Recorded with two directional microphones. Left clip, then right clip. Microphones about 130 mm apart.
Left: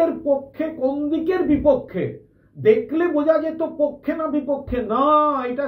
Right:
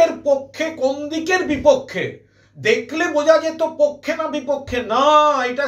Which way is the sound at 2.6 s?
20° right (ahead or behind).